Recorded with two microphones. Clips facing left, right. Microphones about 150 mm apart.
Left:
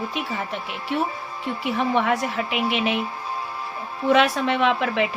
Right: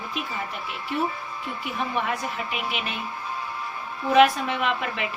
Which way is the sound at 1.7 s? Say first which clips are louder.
Left 6 dB; 80° left.